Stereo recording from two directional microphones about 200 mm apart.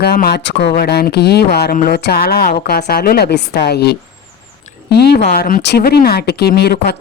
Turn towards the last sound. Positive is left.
turn(degrees=55)  # may be behind; listen again after turning